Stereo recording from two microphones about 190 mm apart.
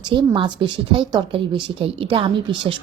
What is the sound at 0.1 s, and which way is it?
A woman's voice, 25° right (ahead or behind).